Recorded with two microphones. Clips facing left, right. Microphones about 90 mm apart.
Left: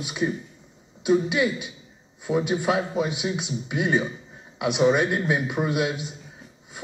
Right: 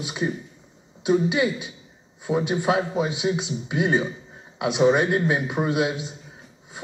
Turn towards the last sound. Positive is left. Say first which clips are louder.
# right 2 dB
turn(degrees=-25)  # may be behind; listen again after turning